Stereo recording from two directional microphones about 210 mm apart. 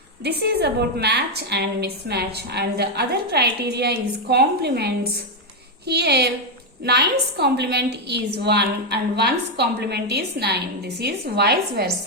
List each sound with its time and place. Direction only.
0.3 s a woman's voice: 50° right (ahead or behind)
5.9 s a woman's voice: 50° right (ahead or behind)